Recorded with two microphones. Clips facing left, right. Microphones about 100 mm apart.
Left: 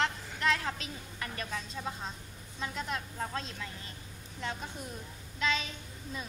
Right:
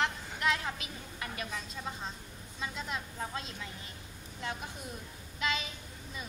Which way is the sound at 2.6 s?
Centre (ahead or behind).